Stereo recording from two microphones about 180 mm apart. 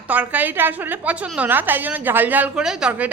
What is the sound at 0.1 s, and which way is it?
A woman's voice, 10° right (ahead or behind).